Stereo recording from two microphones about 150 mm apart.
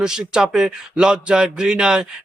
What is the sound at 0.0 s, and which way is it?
Speech, 5° right (ahead or behind).